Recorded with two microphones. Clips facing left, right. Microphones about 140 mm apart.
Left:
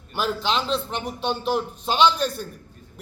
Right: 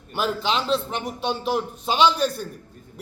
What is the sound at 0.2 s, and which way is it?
A man's voice, 5° right (ahead or behind).